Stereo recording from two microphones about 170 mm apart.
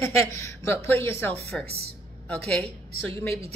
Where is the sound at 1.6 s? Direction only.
65° right (ahead or behind).